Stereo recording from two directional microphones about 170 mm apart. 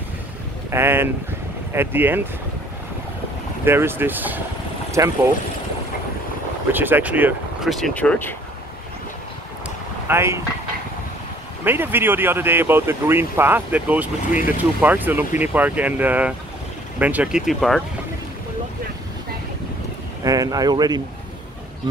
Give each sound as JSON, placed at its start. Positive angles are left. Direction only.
{"t": 0.7, "sound": "speech", "side_deg": -15}
{"t": 3.6, "sound": "speech", "side_deg": -15}
{"t": 6.7, "sound": "speech", "side_deg": -10}
{"t": 7.7, "sound": "speech", "side_deg": 5}
{"t": 10.0, "sound": "speech", "side_deg": -15}
{"t": 11.6, "sound": "speech", "side_deg": -10}
{"t": 20.2, "sound": "speech", "side_deg": -20}